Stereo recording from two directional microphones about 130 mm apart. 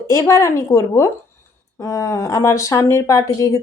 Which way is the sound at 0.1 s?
20° left (ahead or behind).